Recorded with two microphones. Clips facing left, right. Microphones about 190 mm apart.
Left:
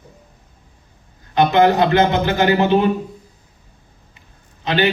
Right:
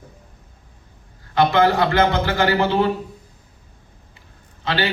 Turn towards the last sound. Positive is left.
turn(degrees=20)  # may be behind; listen again after turning